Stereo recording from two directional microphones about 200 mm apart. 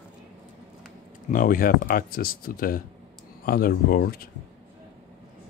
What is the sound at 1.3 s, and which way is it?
Speech, 45° left (ahead or behind).